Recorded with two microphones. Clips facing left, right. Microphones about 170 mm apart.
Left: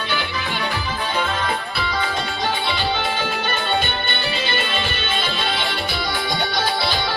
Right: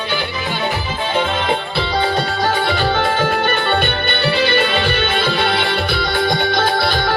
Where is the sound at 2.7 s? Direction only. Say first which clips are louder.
Right 6 dB; 50° right (ahead or behind).